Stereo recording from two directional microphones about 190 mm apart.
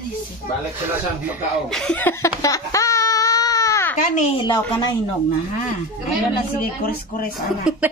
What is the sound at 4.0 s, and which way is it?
Speech, 35° left (ahead or behind).